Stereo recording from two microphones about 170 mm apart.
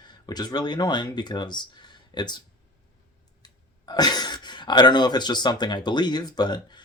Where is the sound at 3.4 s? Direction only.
25° left (ahead or behind).